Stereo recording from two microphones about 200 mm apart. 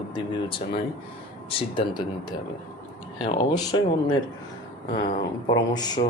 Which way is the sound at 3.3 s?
20° left (ahead or behind).